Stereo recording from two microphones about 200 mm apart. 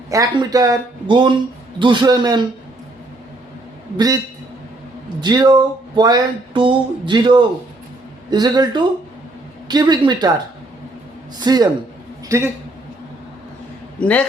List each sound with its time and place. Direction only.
0.1 s speech: 15° right (ahead or behind)
3.9 s speech: 20° right (ahead or behind)
5.2 s speech: 20° right (ahead or behind)
11.3 s speech: 20° right (ahead or behind)
14.0 s a man's voice: 5° left (ahead or behind)